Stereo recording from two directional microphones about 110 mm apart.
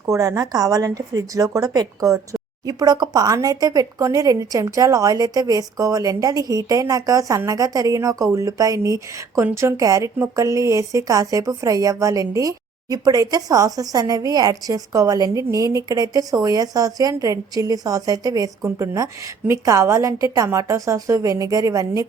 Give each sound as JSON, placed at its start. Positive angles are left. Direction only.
{"t": 0.0, "sound": "speech", "side_deg": -30}